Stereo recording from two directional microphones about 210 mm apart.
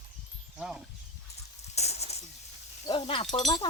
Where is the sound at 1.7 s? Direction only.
30° left (ahead or behind).